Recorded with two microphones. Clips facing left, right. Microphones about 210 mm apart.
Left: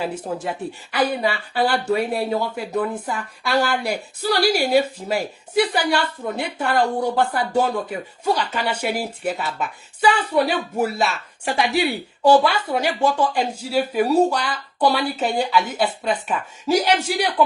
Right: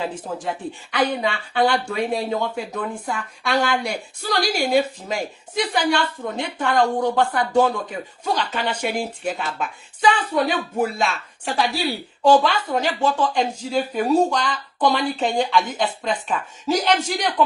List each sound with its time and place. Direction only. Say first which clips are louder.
0.0 s a woman's voice: left 1 dB; 5° left (ahead or behind)